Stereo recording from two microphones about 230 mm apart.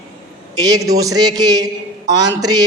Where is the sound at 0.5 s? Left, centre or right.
Centre.